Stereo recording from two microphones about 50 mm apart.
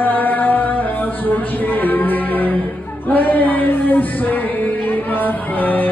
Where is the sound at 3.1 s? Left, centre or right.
Left.